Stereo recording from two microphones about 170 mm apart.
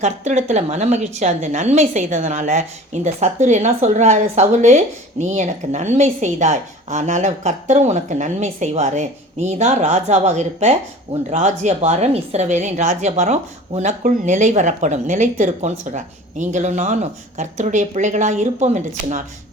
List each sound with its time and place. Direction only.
0.0 s a woman's voice: 40° right (ahead or behind)